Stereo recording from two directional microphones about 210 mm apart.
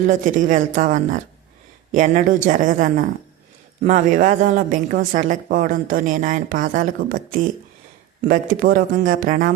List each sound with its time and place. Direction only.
0.3 s a woman's voice: 40° right (ahead or behind)